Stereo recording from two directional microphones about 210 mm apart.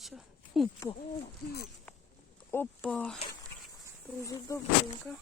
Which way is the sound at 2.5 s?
10° left (ahead or behind).